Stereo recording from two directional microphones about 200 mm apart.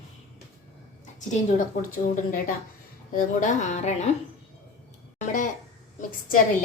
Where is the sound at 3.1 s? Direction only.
40° left (ahead or behind).